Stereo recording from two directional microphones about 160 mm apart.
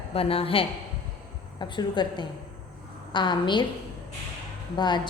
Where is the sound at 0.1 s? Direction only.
35° left (ahead or behind).